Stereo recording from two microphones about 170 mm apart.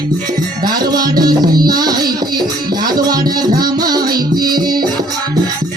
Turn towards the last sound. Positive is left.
turn(degrees=-25)  # may be behind; listen again after turning